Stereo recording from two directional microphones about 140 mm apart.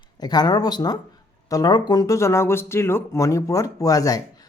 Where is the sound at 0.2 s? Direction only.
30° left (ahead or behind).